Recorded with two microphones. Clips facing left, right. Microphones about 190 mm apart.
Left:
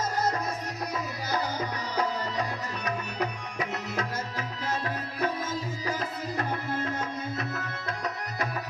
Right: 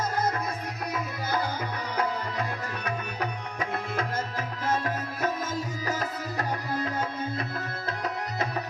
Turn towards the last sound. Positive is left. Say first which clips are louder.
# right 1 dB
turn(degrees=-30)  # may be behind; listen again after turning